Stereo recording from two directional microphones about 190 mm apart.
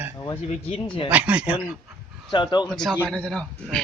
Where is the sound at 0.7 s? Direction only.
25° left (ahead or behind).